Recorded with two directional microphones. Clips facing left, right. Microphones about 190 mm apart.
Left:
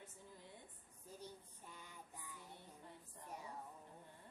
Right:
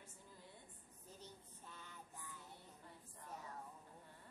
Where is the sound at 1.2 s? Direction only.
15° left (ahead or behind).